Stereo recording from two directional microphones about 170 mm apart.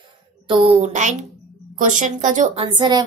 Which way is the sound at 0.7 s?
45° right (ahead or behind).